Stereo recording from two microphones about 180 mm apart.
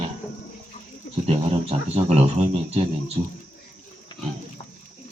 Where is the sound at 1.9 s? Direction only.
35° right (ahead or behind).